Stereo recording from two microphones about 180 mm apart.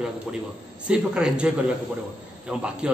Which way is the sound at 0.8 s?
5° right (ahead or behind).